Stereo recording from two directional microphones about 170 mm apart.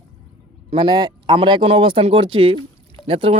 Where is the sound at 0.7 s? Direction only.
30° right (ahead or behind).